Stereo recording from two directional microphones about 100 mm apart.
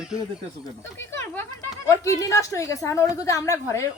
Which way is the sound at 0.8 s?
25° left (ahead or behind).